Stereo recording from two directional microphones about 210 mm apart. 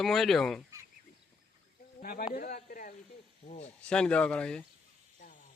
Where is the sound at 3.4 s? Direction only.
30° left (ahead or behind).